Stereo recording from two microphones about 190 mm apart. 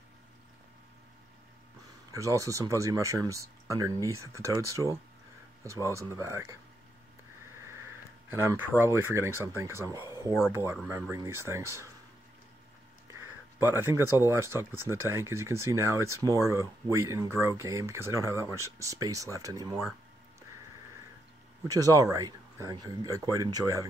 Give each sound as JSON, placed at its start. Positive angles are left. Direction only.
{"t": 2.2, "sound": "speech", "side_deg": -15}
{"t": 8.3, "sound": "speech", "side_deg": -10}
{"t": 13.6, "sound": "speech", "side_deg": -10}
{"t": 21.6, "sound": "speech", "side_deg": -15}